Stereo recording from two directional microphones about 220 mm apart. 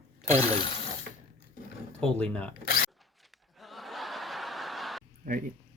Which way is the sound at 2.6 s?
40° left (ahead or behind).